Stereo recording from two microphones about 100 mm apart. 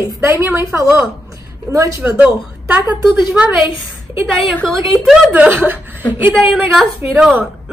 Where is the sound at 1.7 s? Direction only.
35° right (ahead or behind).